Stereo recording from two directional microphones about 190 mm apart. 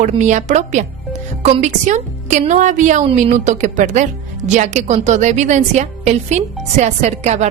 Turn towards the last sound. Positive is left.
turn(degrees=-35)  # may be behind; listen again after turning